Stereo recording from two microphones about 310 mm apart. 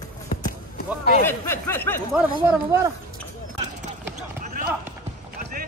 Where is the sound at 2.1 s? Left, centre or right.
Centre.